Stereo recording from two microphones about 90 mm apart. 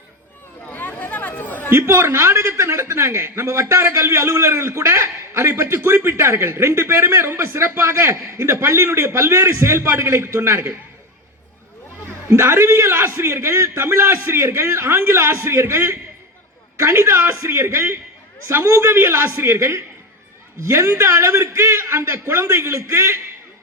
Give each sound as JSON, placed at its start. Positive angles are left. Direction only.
{"t": 0.7, "sound": "chatter", "side_deg": 20}
{"t": 1.7, "sound": "a man's voice", "side_deg": -30}
{"t": 12.3, "sound": "a man's voice", "side_deg": -25}